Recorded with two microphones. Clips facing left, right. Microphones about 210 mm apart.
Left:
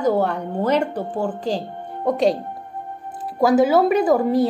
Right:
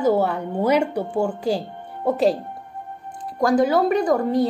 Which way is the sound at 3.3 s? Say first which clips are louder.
Left 2 dB; 5° left (ahead or behind).